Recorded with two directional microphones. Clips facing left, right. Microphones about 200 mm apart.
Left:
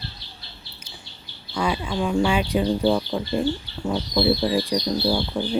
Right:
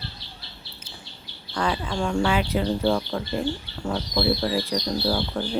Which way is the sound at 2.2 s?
15° left (ahead or behind).